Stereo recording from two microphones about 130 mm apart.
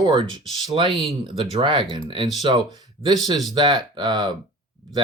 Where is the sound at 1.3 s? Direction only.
40° right (ahead or behind).